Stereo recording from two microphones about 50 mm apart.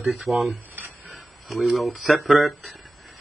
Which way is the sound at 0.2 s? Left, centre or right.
Centre.